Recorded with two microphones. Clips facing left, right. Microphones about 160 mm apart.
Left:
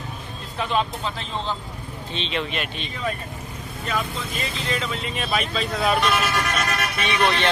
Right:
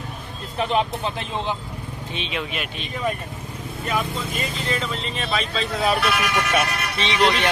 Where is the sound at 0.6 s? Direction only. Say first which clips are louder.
Right 2 dB; 20° right (ahead or behind).